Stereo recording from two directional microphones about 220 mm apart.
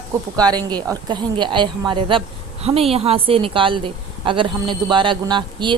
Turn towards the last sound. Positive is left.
turn(degrees=-20)  # may be behind; listen again after turning